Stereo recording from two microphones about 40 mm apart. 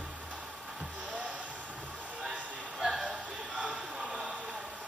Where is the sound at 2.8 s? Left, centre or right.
Centre.